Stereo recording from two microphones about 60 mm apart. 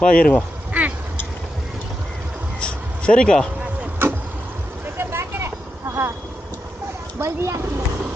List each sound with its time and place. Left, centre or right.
0.0 s speech: centre
0.7 s cat: right
2.6 s a sound: centre
4.0 s a sound: right
4.9 s vehicle: right
7.2 s speech: right